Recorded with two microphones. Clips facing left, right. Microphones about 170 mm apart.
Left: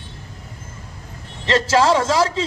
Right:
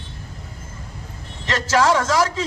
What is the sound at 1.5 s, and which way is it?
Speech, 30° left (ahead or behind).